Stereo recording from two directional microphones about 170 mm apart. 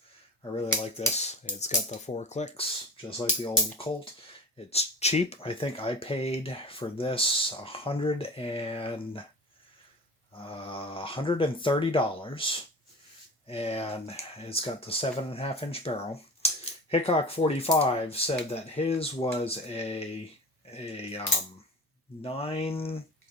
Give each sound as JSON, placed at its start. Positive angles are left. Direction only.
{"t": 1.1, "sound": "speech", "side_deg": 40}
{"t": 10.3, "sound": "speech", "side_deg": 30}